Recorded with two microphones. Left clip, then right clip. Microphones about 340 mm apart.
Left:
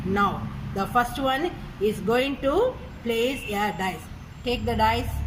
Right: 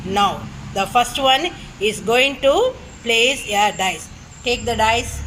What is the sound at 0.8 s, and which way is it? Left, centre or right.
Speech, centre.